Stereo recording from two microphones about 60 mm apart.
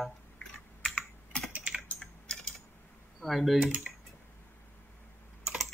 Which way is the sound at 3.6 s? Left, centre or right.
Centre.